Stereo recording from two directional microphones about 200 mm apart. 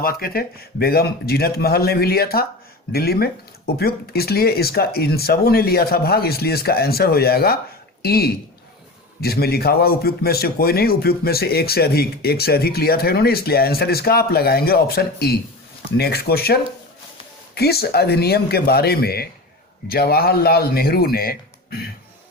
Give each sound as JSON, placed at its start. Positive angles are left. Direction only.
{"t": 0.0, "sound": "a man's voice", "side_deg": 50}